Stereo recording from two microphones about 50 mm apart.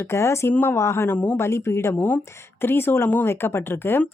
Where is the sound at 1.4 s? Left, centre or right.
Left.